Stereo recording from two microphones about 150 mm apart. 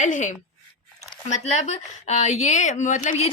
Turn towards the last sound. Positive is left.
turn(degrees=55)  # may be behind; listen again after turning